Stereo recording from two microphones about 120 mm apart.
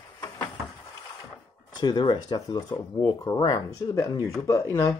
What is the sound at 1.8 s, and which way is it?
Speech, 40° left (ahead or behind).